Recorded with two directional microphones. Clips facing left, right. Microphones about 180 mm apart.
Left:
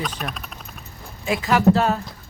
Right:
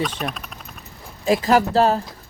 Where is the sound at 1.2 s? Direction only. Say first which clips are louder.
Right 1 dB; 35° right (ahead or behind).